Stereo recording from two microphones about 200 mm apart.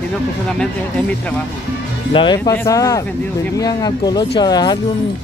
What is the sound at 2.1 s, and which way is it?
Speech, 20° left (ahead or behind).